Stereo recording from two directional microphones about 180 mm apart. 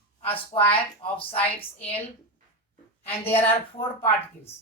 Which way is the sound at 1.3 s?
10° left (ahead or behind).